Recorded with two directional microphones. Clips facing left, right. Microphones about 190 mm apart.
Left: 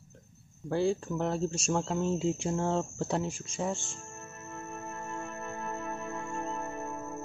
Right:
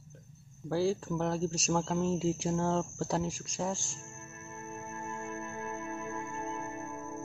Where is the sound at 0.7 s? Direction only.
Centre (ahead or behind).